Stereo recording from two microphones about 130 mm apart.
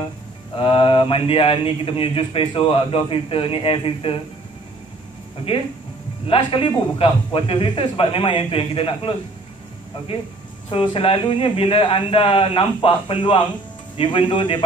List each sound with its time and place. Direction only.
0.6 s speech: 45° left (ahead or behind)
6.2 s speech: 45° left (ahead or behind)
10.7 s speech: 45° left (ahead or behind)